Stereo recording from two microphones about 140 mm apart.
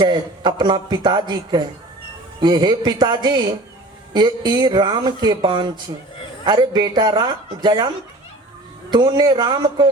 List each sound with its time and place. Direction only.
0.0 s speech: 30° right (ahead or behind)
8.9 s speech: 30° right (ahead or behind)